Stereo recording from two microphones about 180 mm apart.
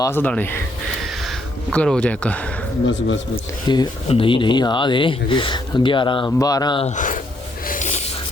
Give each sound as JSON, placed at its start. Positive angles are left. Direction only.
{"t": 0.0, "sound": "speech", "side_deg": 10}
{"t": 1.7, "sound": "speech", "side_deg": 5}
{"t": 2.8, "sound": "speech", "side_deg": 90}
{"t": 3.7, "sound": "speech", "side_deg": 25}
{"t": 6.8, "sound": "speech", "side_deg": 45}
{"t": 7.7, "sound": "a sound", "side_deg": 40}